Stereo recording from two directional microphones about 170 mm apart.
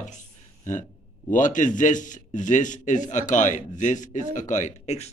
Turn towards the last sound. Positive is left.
turn(degrees=40)  # may be behind; listen again after turning